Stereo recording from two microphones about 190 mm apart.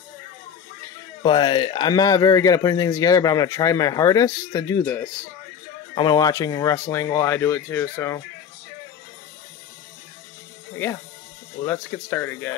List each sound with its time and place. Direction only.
1.2 s speech: 25° left (ahead or behind)
11.6 s speech: 10° left (ahead or behind)